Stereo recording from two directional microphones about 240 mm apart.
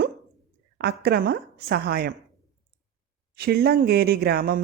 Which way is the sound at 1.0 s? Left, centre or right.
Right.